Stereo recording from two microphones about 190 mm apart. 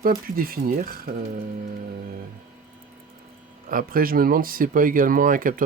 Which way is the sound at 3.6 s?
50° right (ahead or behind).